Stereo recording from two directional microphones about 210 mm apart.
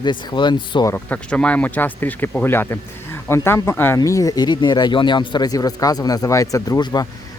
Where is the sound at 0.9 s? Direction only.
5° left (ahead or behind).